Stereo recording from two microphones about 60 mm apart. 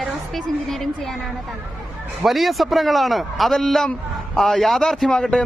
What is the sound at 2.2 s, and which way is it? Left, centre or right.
A woman's voice, centre.